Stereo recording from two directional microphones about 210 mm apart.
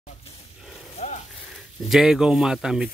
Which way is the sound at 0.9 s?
30° left (ahead or behind).